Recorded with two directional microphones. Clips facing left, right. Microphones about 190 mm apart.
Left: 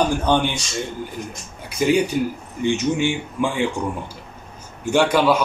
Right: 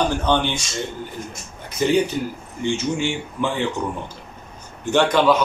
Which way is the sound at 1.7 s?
10° left (ahead or behind).